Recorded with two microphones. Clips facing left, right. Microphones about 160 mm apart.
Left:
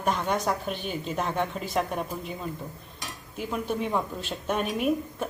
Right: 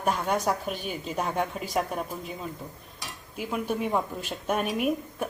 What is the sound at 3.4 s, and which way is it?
A woman's voice, 5° right (ahead or behind).